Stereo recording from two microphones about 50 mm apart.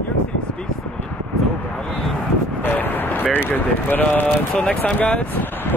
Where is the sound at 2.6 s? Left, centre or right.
Left.